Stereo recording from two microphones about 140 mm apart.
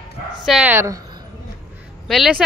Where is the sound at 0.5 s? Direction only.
10° right (ahead or behind).